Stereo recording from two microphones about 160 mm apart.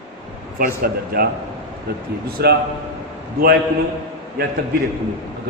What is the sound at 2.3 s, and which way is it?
Speech, 85° right.